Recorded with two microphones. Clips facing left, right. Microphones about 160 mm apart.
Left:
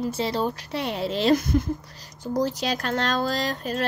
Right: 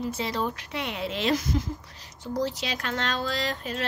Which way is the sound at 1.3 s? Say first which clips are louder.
Left 6 dB; 55° left (ahead or behind).